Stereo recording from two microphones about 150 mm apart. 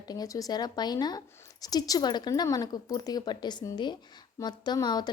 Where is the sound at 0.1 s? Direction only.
25° left (ahead or behind).